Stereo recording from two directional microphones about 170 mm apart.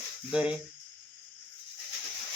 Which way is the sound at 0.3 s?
5° right (ahead or behind).